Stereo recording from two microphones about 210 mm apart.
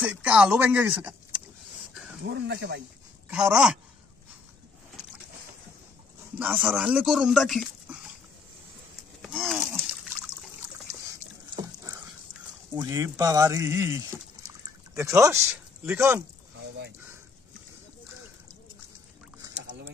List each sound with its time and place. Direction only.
0.0 s speech: 5° right (ahead or behind)
2.2 s speech: 50° right (ahead or behind)
3.3 s speech: 5° right (ahead or behind)
6.3 s speech: 10° right (ahead or behind)
9.2 s a sound: centre (ahead or behind)
10.9 s a sound: 15° right (ahead or behind)
12.7 s speech: 15° right (ahead or behind)